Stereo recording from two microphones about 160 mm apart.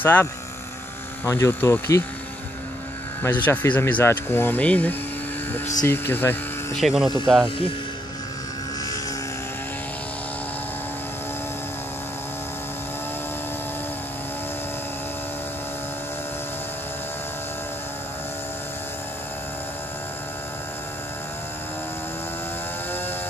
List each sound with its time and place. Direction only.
0.0 s speech: 15° left (ahead or behind)
3.2 s speech: 10° left (ahead or behind)
6.8 s speech: 5° right (ahead or behind)
7.4 s speech: 35° left (ahead or behind)